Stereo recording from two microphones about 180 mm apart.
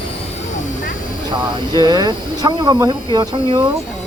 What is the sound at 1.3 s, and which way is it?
Speech, 25° right (ahead or behind).